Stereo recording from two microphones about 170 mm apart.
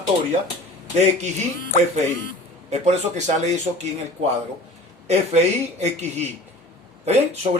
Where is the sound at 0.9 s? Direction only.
45° right (ahead or behind).